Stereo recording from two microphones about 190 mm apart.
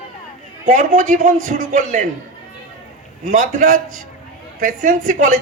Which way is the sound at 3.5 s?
45° right (ahead or behind).